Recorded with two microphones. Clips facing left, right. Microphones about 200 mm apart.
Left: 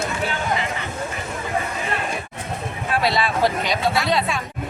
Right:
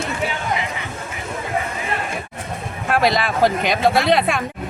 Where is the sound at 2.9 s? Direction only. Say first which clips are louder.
Right 3 dB; 50° right (ahead or behind).